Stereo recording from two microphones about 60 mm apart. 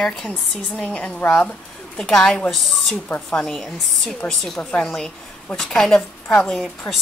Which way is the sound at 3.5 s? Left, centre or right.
Centre.